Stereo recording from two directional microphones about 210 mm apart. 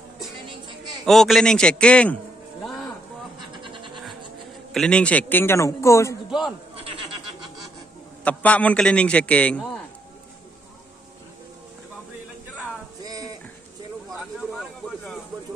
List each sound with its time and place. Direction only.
1.0 s a man's voice: centre (ahead or behind)
3.6 s music: 25° right (ahead or behind)
4.7 s a man's voice: 5° left (ahead or behind)
6.7 s goat: 25° right (ahead or behind)
8.2 s a man's voice: 5° left (ahead or behind)
13.0 s a sound: 15° right (ahead or behind)
14.1 s a sound: centre (ahead or behind)